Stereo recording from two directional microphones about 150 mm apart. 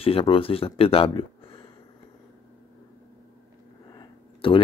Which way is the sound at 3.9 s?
35° left (ahead or behind).